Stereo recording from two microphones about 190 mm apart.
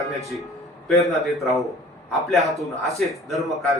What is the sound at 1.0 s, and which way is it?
A man's voice, centre (ahead or behind).